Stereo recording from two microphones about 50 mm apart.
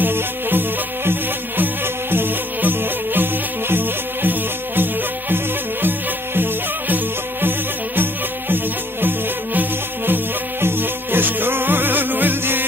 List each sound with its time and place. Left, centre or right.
0.0 s music: right